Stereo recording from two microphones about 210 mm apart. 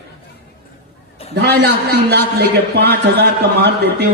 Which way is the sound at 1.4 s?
50° right (ahead or behind).